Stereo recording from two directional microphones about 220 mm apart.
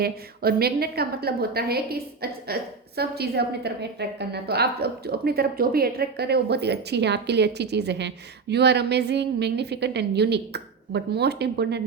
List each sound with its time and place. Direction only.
0.0 s a woman's voice: 45° right (ahead or behind)